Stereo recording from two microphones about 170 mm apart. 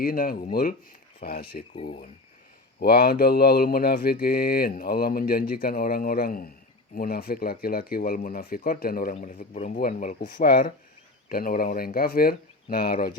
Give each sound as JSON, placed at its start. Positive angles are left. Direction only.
{"t": 0.0, "sound": "speech", "side_deg": 60}
{"t": 1.7, "sound": "speech", "side_deg": 35}
{"t": 2.8, "sound": "speech", "side_deg": 65}
{"t": 10.3, "sound": "speech", "side_deg": 65}